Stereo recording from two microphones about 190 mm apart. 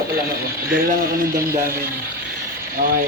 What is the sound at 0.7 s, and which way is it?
Speech, 50° right (ahead or behind).